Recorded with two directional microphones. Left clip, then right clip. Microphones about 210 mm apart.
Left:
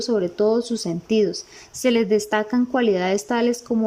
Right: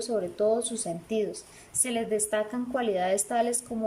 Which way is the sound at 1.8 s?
45° left (ahead or behind).